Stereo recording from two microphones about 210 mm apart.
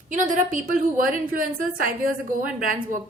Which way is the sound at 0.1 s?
35° right (ahead or behind).